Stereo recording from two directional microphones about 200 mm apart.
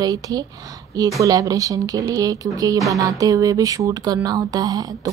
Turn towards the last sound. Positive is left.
turn(degrees=-20)  # may be behind; listen again after turning